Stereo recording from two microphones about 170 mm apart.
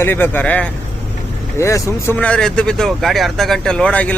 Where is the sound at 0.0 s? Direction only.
10° left (ahead or behind).